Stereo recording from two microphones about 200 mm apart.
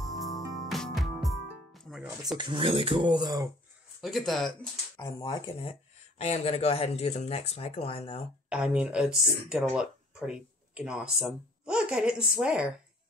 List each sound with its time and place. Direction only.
0.2 s music: centre (ahead or behind)
2.3 s speech: 25° right (ahead or behind)
4.0 s speech: centre (ahead or behind)
5.2 s speech: 25° left (ahead or behind)
8.5 s speech: 5° right (ahead or behind)